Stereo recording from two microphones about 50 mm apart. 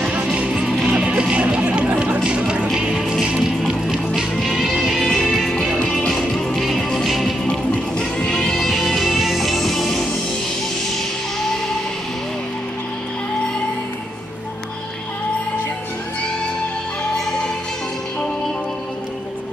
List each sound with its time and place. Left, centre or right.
0.0 s music: right
2.7 s music: centre
7.1 s music: centre
7.4 s music: left
8.3 s music: centre